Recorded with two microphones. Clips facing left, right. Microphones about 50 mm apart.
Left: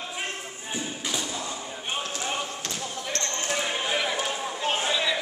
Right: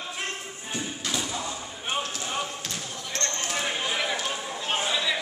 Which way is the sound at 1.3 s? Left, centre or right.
Centre.